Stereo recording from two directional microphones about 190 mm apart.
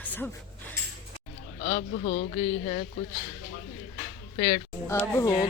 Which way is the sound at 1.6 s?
35° left (ahead or behind).